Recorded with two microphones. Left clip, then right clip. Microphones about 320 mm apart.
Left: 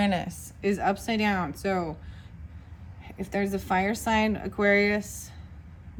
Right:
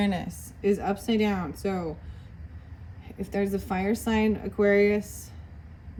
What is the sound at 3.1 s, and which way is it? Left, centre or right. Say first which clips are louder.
A woman's voice: right 1 dB; left.